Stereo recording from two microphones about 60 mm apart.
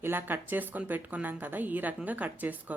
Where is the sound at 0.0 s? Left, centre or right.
Right.